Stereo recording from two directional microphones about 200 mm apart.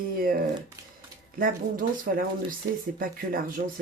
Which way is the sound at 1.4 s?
45° right (ahead or behind).